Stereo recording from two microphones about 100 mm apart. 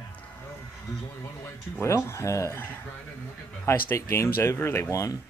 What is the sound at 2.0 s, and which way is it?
Speech, 30° left (ahead or behind).